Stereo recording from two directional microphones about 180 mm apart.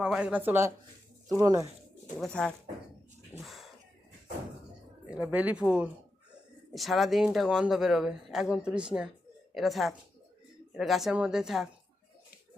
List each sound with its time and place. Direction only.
0.0 s speech: 5° right (ahead or behind); by 1.6 s 20° right (ahead or behind)
2.1 s speech: 5° left (ahead or behind)
3.4 s a sound: centre (ahead or behind)
5.1 s speech: 5° right (ahead or behind)